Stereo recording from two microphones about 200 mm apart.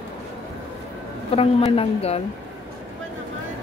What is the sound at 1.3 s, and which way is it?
Speech, 30° left (ahead or behind).